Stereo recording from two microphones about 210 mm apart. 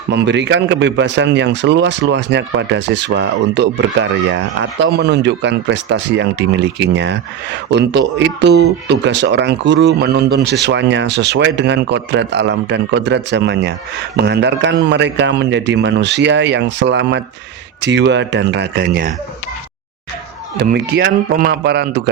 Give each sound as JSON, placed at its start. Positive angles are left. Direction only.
{"t": 0.1, "sound": "speech", "side_deg": -55}
{"t": 20.6, "sound": "a man's voice", "side_deg": -50}